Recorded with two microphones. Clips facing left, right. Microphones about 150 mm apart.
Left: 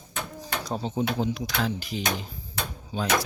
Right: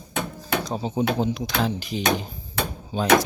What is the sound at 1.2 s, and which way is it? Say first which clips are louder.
Speech: right 3 dB; 20° right (ahead or behind).